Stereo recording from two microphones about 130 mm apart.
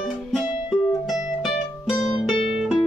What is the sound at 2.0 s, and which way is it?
Music, centre (ahead or behind).